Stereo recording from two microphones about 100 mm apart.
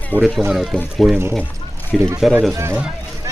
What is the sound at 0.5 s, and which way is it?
Speech, centre (ahead or behind).